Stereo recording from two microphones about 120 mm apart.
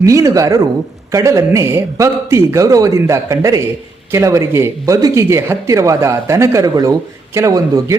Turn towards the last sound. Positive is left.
turn(degrees=-30)  # may be behind; listen again after turning